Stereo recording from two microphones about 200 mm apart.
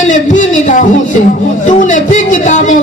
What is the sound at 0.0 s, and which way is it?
Speech, 40° left (ahead or behind).